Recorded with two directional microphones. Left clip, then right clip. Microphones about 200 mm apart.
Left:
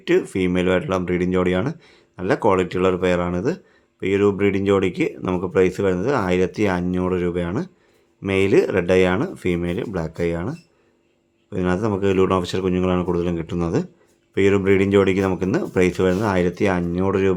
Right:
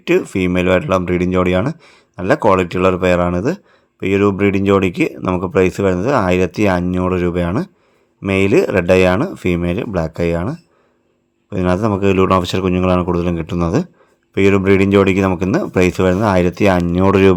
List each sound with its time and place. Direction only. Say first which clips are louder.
0.0 s speech: right 4 dB; 25° right (ahead or behind)